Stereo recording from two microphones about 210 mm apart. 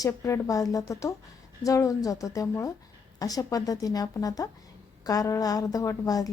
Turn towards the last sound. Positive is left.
turn(degrees=15)  # may be behind; listen again after turning